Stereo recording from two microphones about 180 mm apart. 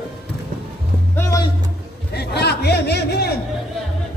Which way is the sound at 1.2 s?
20° left (ahead or behind).